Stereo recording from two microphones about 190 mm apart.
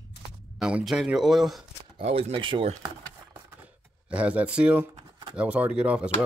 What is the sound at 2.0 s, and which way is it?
Speech, 30° right (ahead or behind).